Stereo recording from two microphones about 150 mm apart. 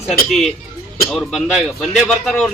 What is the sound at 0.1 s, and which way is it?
A man's voice, centre (ahead or behind).